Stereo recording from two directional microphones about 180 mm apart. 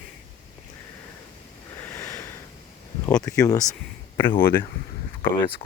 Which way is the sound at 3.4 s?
20° left (ahead or behind).